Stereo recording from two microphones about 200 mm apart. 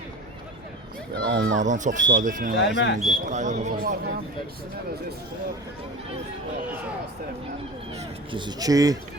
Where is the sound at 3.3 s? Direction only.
35° right (ahead or behind).